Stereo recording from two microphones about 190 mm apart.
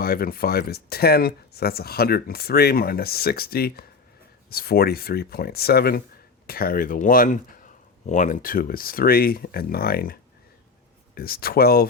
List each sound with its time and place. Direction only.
0.0 s speech: 50° left (ahead or behind)